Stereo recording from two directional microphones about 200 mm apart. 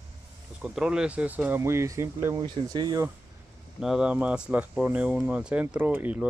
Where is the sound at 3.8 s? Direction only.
5° right (ahead or behind).